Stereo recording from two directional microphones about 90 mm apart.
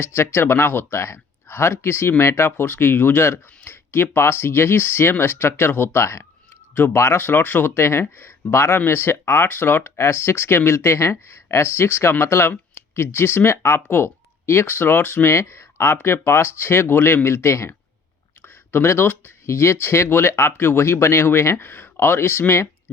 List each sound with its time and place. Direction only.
0.0 s speech: 30° left (ahead or behind)